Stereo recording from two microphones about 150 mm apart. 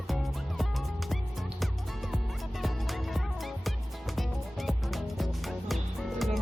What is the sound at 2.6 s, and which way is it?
Music, centre (ahead or behind).